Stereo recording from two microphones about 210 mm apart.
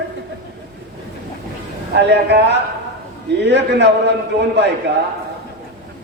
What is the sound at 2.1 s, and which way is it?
A man's voice, 55° right (ahead or behind).